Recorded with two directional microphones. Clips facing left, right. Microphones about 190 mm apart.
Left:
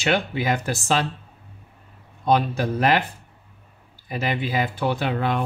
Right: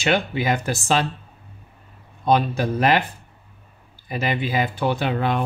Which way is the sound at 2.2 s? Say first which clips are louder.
Right 1 dB; 20° right (ahead or behind).